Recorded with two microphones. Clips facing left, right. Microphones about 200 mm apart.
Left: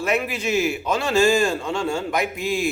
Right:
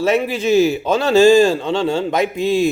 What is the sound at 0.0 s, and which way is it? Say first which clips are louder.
A man's voice: right 7 dB; 25° right (ahead or behind).